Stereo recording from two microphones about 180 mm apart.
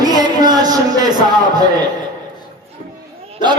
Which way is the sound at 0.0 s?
20° right (ahead or behind).